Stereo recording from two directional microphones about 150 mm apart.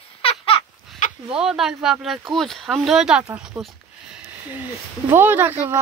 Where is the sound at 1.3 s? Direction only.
5° right (ahead or behind).